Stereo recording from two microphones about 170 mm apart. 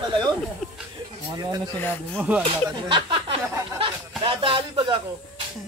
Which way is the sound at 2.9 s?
30° right (ahead or behind).